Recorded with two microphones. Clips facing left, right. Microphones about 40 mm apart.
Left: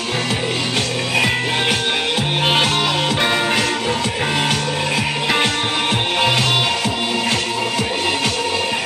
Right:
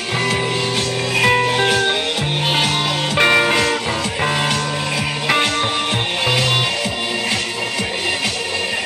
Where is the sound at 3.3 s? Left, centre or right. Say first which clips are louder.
Right 4 dB; right.